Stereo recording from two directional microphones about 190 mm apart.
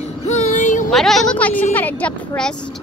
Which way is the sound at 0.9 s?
Centre (ahead or behind).